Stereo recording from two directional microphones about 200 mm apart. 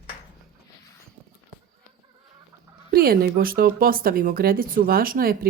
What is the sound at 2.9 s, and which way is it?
Speech, 50° right (ahead or behind).